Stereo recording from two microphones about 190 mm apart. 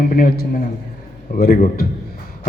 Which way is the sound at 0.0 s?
50° left (ahead or behind).